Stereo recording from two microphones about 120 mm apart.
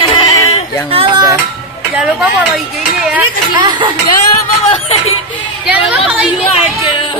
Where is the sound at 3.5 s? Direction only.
40° right (ahead or behind).